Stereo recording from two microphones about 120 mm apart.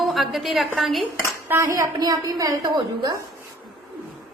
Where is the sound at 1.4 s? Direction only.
25° right (ahead or behind).